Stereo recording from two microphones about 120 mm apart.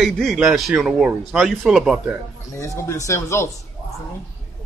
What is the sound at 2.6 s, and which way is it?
Speech, 25° left (ahead or behind).